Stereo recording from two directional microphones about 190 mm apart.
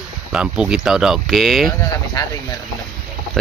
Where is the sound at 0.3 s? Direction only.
5° right (ahead or behind).